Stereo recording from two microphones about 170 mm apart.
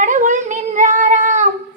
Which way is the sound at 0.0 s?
45° right (ahead or behind).